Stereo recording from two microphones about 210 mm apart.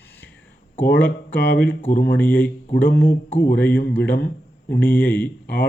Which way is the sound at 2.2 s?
10° left (ahead or behind).